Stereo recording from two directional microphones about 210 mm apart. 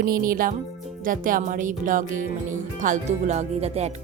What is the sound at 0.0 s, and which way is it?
Speech, 45° right (ahead or behind).